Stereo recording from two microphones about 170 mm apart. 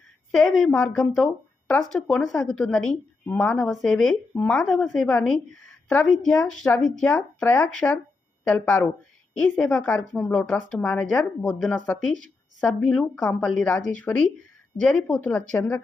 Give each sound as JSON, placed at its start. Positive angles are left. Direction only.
{"t": 0.3, "sound": "a woman's voice", "side_deg": 0}